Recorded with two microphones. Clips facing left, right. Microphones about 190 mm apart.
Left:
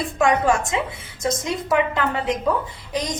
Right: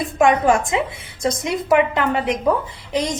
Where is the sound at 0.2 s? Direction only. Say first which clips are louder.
Right 3 dB; 20° right (ahead or behind).